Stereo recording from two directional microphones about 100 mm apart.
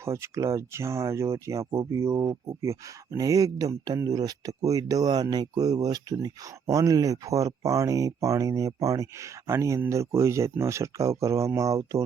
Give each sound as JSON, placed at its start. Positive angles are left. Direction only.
{"t": 0.0, "sound": "speech", "side_deg": -30}